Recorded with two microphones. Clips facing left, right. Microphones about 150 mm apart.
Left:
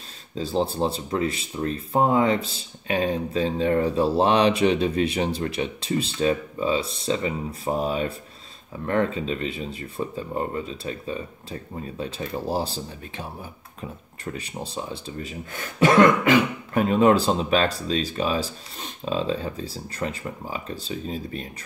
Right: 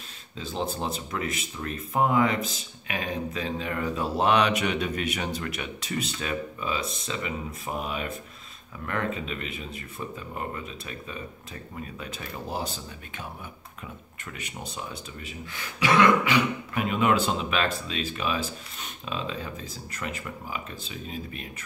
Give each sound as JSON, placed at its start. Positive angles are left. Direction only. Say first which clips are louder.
{"t": 0.3, "sound": "speech", "louder": "left 7 dB", "side_deg": 35}
{"t": 15.5, "sound": "speech", "louder": "left 6 dB", "side_deg": 45}